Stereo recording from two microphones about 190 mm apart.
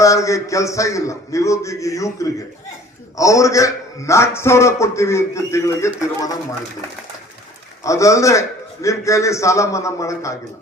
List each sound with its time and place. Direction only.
0.0 s a man's voice: 15° left (ahead or behind)
7.9 s a man's voice: 15° left (ahead or behind)